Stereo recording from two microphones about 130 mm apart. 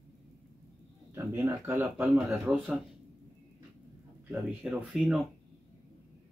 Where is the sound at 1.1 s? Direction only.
20° right (ahead or behind).